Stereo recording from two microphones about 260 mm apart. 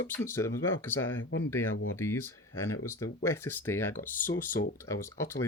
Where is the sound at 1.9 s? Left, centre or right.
Centre.